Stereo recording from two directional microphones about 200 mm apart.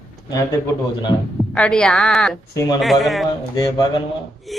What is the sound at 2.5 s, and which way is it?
Speech, 15° left (ahead or behind).